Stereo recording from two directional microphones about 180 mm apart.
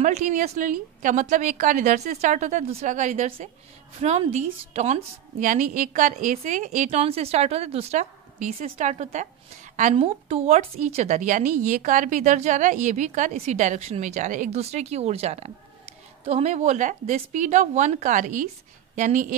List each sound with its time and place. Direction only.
0.0 s a woman's voice: 45° right (ahead or behind)